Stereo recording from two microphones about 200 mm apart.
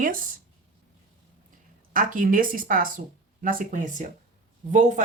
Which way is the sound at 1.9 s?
45° right (ahead or behind).